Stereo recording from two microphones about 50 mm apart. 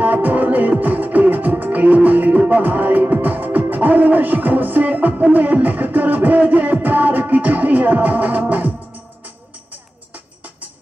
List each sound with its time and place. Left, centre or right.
0.0 s music: right